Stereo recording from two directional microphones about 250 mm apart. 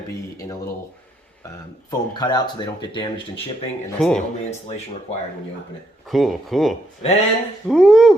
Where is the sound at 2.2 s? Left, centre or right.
Centre.